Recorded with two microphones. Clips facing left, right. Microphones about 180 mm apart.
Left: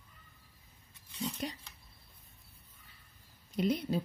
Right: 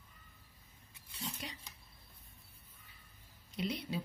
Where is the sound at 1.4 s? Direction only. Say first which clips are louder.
Left 9 dB; 45° left (ahead or behind).